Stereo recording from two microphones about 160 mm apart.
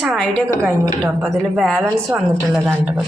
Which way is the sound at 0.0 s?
5° left (ahead or behind).